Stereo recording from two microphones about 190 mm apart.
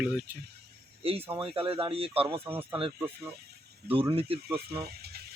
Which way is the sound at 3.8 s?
60° right (ahead or behind).